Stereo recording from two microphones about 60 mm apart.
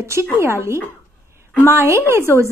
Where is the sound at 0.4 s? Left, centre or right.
Right.